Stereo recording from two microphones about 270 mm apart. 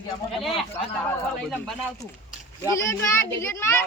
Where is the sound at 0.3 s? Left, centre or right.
Centre.